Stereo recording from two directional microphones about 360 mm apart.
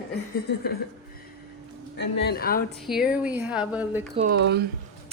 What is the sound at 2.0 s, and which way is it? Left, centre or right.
Speech, left.